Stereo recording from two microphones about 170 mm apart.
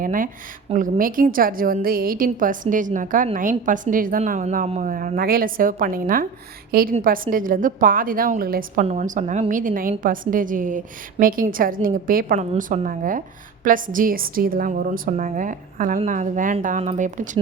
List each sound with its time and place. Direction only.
0.0 s a woman's voice: 55° right (ahead or behind)
8.8 s a woman's voice: 40° right (ahead or behind)